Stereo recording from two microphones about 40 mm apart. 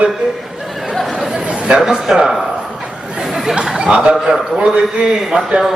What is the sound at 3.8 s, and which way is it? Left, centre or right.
A man's voice, right.